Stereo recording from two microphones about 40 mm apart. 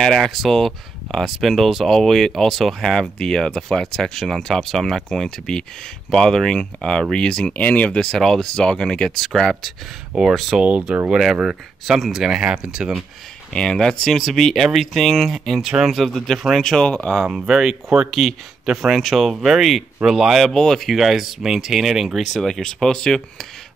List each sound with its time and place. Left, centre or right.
0.0 s speech: centre
7.5 s speech: left
7.9 s speech: left
8.2 s speech: centre
8.5 s speech: centre
10.6 s speech: right
12.2 s speech: centre
13.5 s speech: centre
16.1 s speech: centre
16.8 s speech: left
17.3 s speech: centre
18.9 s speech: centre
20.4 s speech: centre
22.2 s speech: centre